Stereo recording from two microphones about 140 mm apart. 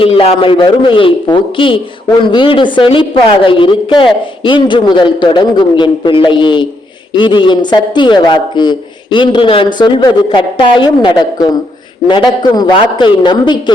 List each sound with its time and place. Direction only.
0.0 s a man's voice: 45° left (ahead or behind)